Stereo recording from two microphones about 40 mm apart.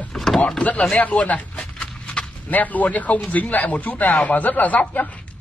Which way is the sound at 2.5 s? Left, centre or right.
Left.